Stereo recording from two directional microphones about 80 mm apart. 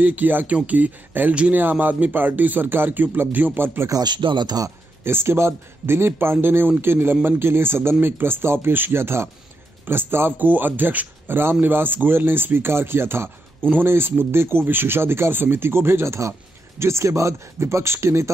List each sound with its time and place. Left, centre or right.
0.0 s speech: right
3.9 s speech: right
5.0 s speech: right